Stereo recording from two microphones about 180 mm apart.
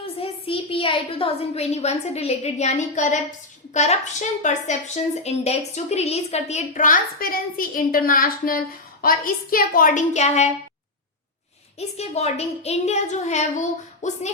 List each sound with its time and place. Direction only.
0.0 s a woman's voice: 30° left (ahead or behind)
11.8 s a woman's voice: 35° left (ahead or behind)